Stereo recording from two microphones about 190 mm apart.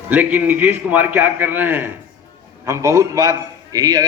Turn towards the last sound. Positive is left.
turn(degrees=-20)  # may be behind; listen again after turning